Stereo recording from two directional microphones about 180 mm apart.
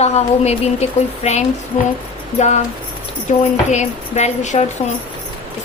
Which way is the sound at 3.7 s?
40° left (ahead or behind).